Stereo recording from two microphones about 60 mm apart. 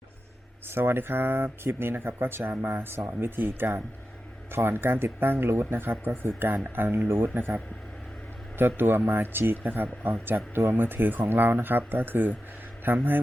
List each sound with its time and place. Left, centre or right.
0.7 s speech: right
8.5 s a man's voice: right